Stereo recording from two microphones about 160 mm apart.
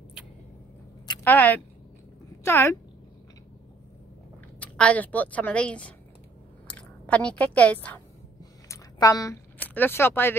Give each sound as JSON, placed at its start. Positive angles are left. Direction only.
{"t": 1.2, "sound": "speech", "side_deg": 10}
{"t": 4.6, "sound": "speech", "side_deg": 10}
{"t": 8.4, "sound": "a sound", "side_deg": 20}
{"t": 9.6, "sound": "speech", "side_deg": 10}